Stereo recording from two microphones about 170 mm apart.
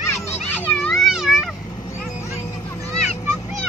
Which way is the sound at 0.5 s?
5° left (ahead or behind).